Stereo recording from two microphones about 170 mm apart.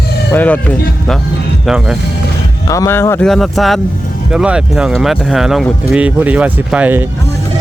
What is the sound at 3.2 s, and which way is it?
Speech, centre (ahead or behind).